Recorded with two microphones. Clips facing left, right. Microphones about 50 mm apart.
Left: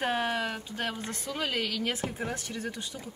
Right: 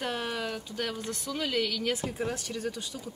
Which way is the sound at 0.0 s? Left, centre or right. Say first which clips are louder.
Left 3 dB; left.